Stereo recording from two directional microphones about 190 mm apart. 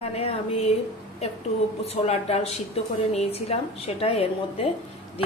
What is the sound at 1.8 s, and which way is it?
A woman's voice, 35° left (ahead or behind).